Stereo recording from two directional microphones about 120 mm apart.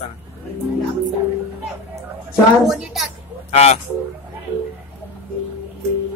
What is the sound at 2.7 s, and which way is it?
Speech, 5° right (ahead or behind).